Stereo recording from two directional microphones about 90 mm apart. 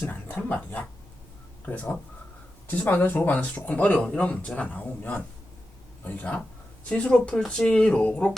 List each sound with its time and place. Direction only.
0.0 s speech: 20° left (ahead or behind)